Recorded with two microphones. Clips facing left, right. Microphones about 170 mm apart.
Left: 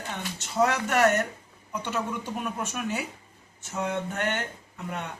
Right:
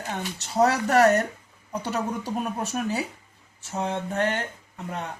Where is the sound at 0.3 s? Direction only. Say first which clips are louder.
Right 3 dB; 35° right (ahead or behind).